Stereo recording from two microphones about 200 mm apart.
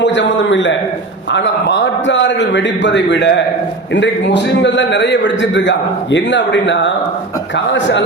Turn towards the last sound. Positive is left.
turn(degrees=65)  # may be behind; listen again after turning